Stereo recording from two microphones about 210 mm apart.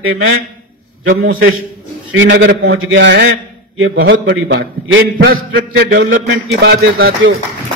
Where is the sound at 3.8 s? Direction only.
70° right (ahead or behind); by 6.8 s 50° right (ahead or behind).